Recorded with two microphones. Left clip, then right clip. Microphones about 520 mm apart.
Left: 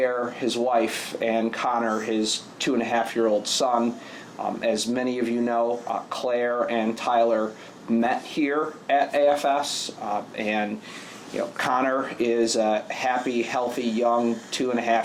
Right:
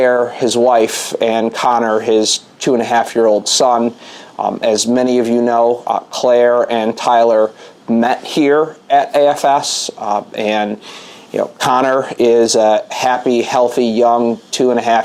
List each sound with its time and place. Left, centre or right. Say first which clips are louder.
0.0 s speech: right 12 dB; right